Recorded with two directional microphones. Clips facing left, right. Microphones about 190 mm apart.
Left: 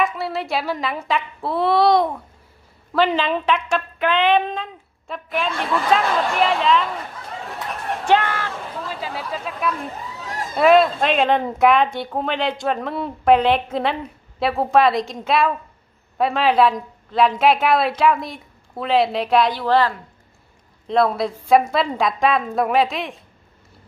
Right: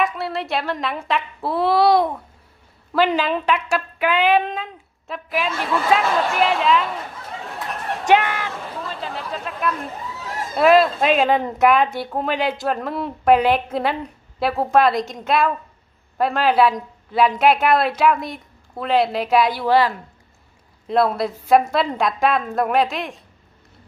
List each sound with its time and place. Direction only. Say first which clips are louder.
0.0 s speech: even; centre (ahead or behind)
8.0 s speech: right 1 dB; 15° right (ahead or behind)
8.8 s speech: left 1 dB; centre (ahead or behind)